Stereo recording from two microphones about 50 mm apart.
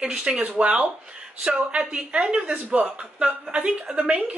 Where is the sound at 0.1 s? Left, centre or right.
Centre.